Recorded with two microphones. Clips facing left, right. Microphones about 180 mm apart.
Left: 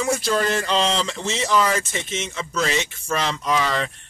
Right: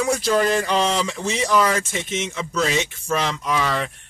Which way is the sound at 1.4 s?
5° left (ahead or behind).